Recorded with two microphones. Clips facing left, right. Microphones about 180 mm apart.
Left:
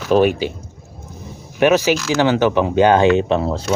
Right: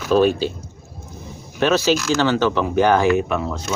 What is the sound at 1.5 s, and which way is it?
Speech, 15° left (ahead or behind).